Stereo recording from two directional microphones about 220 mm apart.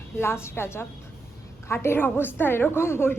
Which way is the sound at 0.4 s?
10° left (ahead or behind).